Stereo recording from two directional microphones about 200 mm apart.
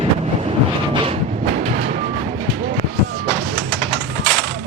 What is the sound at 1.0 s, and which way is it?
Train, 35° right (ahead or behind).